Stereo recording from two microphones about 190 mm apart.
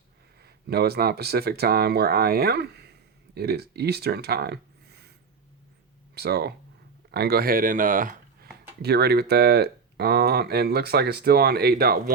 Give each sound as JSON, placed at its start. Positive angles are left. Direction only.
{"t": 0.4, "sound": "speech", "side_deg": -55}
{"t": 6.1, "sound": "speech", "side_deg": -55}